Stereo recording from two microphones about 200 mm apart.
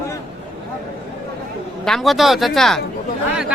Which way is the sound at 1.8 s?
Centre (ahead or behind).